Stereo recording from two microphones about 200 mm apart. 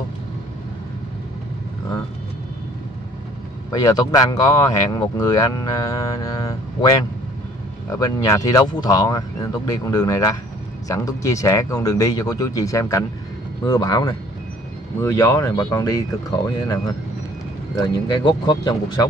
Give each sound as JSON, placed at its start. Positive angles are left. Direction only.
{"t": 3.7, "sound": "speech", "side_deg": 20}
{"t": 7.9, "sound": "speech", "side_deg": 15}
{"t": 18.1, "sound": "speech", "side_deg": 20}